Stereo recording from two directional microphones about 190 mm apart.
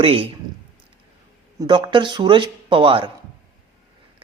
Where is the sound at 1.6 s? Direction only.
25° right (ahead or behind).